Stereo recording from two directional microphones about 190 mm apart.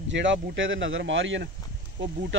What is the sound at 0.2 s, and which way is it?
Speech, 80° right.